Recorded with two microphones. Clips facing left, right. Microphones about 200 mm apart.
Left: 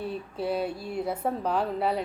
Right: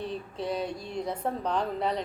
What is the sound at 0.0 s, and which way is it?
A woman's voice, 5° left (ahead or behind).